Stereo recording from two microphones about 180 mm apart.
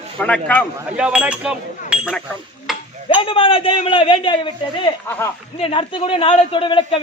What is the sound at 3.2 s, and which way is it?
A man's voice, 30° left (ahead or behind).